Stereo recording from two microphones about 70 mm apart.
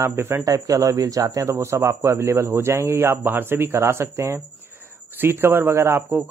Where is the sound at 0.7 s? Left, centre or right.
Right.